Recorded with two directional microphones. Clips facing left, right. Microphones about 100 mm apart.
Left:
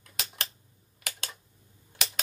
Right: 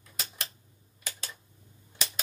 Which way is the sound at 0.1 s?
80° left.